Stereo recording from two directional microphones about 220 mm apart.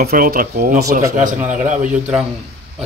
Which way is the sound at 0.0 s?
40° right (ahead or behind).